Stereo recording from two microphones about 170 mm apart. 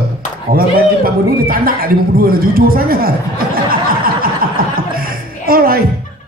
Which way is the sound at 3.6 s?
60° right (ahead or behind).